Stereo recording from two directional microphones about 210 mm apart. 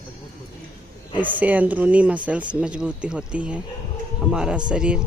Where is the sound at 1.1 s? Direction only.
10° right (ahead or behind).